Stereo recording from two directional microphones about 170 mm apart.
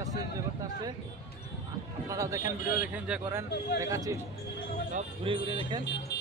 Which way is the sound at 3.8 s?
20° right (ahead or behind).